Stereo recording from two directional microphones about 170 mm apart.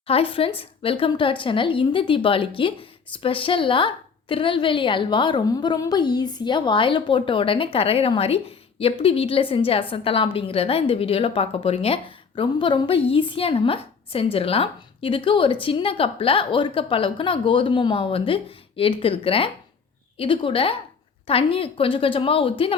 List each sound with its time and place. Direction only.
0.1 s a woman's voice: 30° left (ahead or behind)